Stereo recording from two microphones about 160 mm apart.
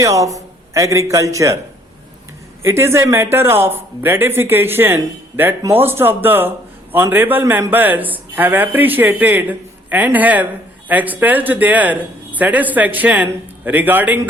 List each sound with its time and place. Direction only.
0.0 s a man's voice: 20° right (ahead or behind)
2.6 s a man's voice: 15° right (ahead or behind)